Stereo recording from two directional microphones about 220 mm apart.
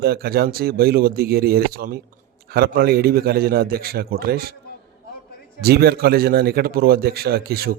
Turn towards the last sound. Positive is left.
turn(degrees=-45)  # may be behind; listen again after turning